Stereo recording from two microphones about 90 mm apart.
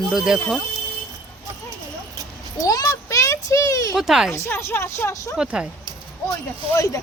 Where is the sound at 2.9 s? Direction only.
30° left (ahead or behind).